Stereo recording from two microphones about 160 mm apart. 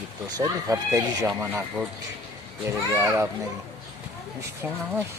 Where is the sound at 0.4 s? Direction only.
20° right (ahead or behind).